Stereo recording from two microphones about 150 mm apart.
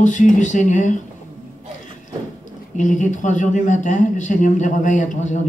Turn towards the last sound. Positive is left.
turn(degrees=55)  # may be behind; listen again after turning